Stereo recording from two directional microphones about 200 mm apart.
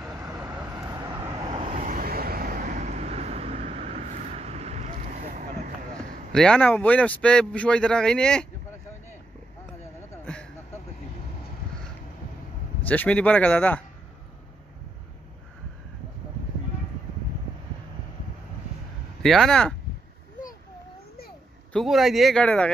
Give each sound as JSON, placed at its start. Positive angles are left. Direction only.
{"t": 0.7, "sound": "vehicle", "side_deg": -20}
{"t": 6.3, "sound": "speech", "side_deg": 5}
{"t": 10.2, "sound": "a sound", "side_deg": 5}
{"t": 12.8, "sound": "speech", "side_deg": 10}
{"t": 19.2, "sound": "speech", "side_deg": 0}
{"t": 21.7, "sound": "speech", "side_deg": 0}